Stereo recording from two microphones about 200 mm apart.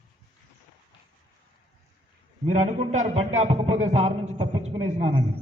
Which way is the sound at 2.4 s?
35° right (ahead or behind).